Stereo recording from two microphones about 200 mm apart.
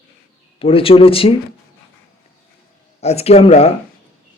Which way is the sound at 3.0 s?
30° left (ahead or behind).